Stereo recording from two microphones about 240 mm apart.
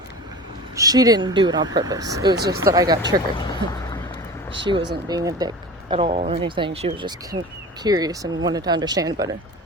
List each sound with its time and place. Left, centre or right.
0.8 s speech: centre
2.3 s speech: right
2.6 s speech: centre
3.3 s speech: centre
4.7 s speech: centre